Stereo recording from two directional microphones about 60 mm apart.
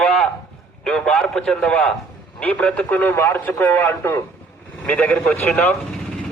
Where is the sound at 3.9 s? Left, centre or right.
Left.